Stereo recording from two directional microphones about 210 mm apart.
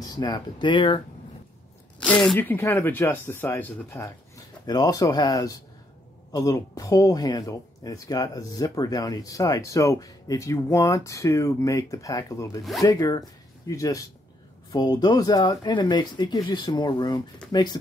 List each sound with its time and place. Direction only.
0.0 s speech: 20° left (ahead or behind)
2.0 s speech: 5° left (ahead or behind); by 17.7 s 20° left (ahead or behind)